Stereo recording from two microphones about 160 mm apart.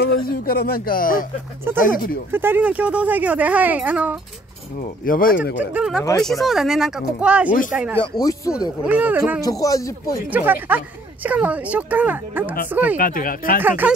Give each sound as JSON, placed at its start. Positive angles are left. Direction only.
{"t": 0.0, "sound": "speech", "side_deg": 70}
{"t": 2.3, "sound": "speech", "side_deg": -15}
{"t": 4.7, "sound": "speech", "side_deg": 60}
{"t": 5.6, "sound": "speech", "side_deg": -10}
{"t": 8.0, "sound": "speech", "side_deg": 20}
{"t": 8.8, "sound": "speech", "side_deg": -10}
{"t": 9.4, "sound": "speech", "side_deg": 20}
{"t": 10.3, "sound": "speech", "side_deg": -10}
{"t": 12.9, "sound": "speech", "side_deg": 60}
{"t": 13.6, "sound": "speech", "side_deg": -10}